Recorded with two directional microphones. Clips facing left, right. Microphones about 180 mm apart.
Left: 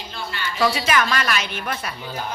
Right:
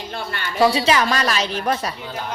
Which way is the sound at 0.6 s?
30° right (ahead or behind).